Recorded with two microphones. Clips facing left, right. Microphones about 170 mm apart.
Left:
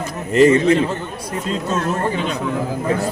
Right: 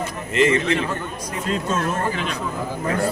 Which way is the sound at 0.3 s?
35° left (ahead or behind).